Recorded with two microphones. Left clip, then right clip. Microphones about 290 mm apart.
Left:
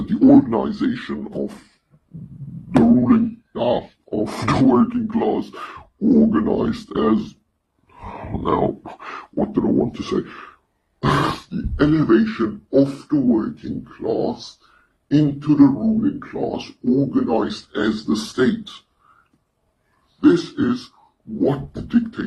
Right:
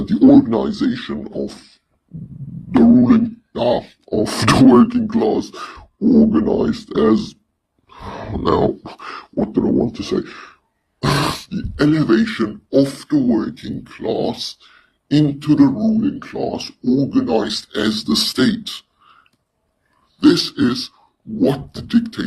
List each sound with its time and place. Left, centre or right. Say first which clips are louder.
0.1 s a sound: right 2 dB; centre
2.8 s a sound: right 4 dB; right
11.0 s grunt: even; right
11.8 s speech: right 1 dB; right
14.0 s speech: right 1 dB; right
15.0 s speech: right 2 dB; right
20.1 s speech: right 2 dB; right